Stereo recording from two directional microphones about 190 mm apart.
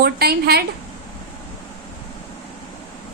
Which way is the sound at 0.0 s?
55° right (ahead or behind).